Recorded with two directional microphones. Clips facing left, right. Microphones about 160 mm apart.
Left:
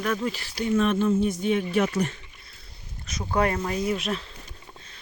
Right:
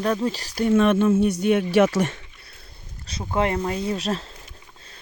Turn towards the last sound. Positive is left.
turn(degrees=-35)  # may be behind; listen again after turning